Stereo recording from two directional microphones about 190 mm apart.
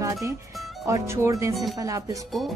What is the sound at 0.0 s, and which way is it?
Music, 15° right (ahead or behind).